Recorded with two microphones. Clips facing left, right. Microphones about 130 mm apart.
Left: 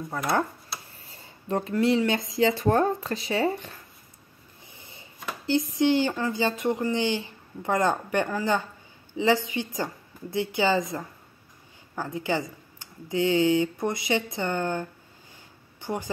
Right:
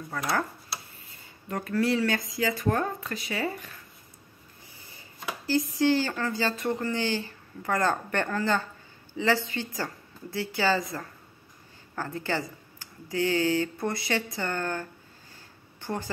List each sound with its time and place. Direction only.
1.1 s speech: 25° left (ahead or behind)
4.7 s a sound: 20° left (ahead or behind)
5.5 s speech: 20° left (ahead or behind)